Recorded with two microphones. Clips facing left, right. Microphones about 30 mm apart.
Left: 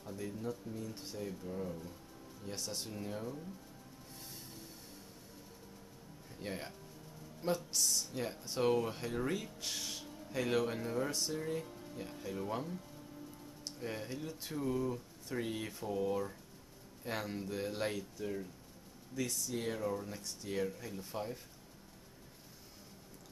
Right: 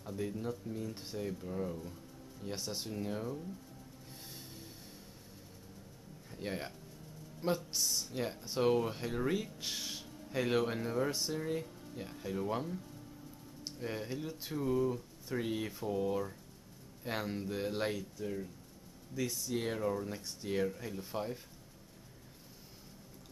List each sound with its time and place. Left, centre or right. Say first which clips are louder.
0.0 s speech: right 3 dB; centre
6.4 s speech: right 3 dB; centre
11.6 s music: even; centre
11.9 s speech: right 3 dB; centre
18.2 s speech: right 1 dB; centre